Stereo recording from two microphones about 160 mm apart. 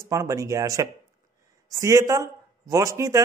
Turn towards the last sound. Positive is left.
turn(degrees=-20)  # may be behind; listen again after turning